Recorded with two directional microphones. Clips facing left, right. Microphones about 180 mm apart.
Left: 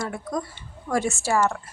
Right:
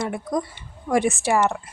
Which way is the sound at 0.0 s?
20° right (ahead or behind).